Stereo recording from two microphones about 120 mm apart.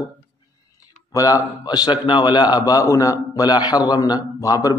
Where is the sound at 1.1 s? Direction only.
30° left (ahead or behind).